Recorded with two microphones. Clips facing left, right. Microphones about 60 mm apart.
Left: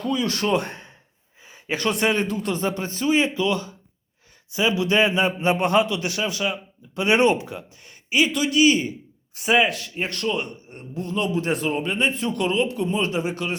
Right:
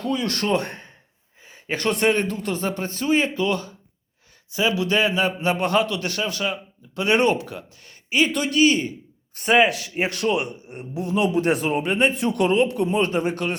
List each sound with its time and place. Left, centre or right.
0.2 s a man's voice: right
0.4 s speech: centre
3.3 s speech: right
4.5 s a man's voice: left
8.3 s speech: centre
9.3 s a man's voice: centre